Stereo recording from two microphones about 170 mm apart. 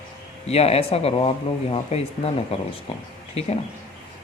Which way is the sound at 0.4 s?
35° left (ahead or behind).